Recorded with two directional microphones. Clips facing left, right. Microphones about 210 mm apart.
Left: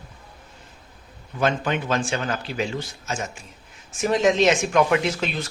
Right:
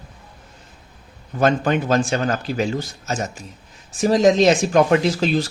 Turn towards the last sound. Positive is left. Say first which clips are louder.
# right 6 dB
turn(degrees=-35)  # may be behind; listen again after turning